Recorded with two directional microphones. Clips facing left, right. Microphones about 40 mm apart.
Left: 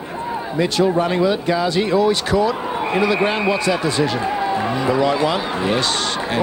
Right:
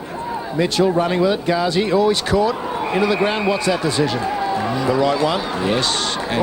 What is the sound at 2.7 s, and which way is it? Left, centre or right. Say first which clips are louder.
Speech: even; left.